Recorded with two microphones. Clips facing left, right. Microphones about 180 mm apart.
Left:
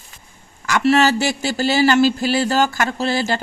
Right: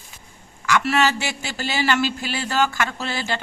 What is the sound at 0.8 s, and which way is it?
Speech, 35° left (ahead or behind).